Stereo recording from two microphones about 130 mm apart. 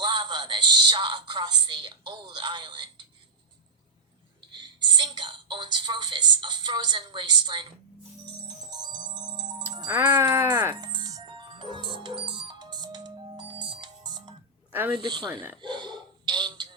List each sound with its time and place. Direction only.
0.0 s a woman's voice: 35° right (ahead or behind)
4.4 s a woman's voice: 35° right (ahead or behind)
8.2 s music: 35° right (ahead or behind)
9.9 s speech: 15° right (ahead or behind)
10.8 s music: 35° right (ahead or behind)
14.7 s speech: 15° right (ahead or behind)
14.9 s a woman's voice: 35° right (ahead or behind)
15.3 s speech: 15° right (ahead or behind)
15.6 s a sound: 35° right (ahead or behind)